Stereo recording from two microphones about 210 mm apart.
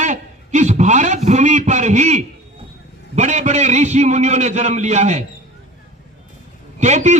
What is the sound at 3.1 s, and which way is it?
A man's voice, 35° right (ahead or behind).